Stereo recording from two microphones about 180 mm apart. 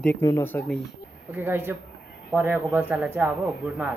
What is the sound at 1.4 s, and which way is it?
Speech, 10° right (ahead or behind).